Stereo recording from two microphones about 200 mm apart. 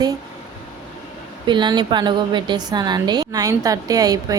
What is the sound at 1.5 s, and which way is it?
A woman's voice, 20° right (ahead or behind).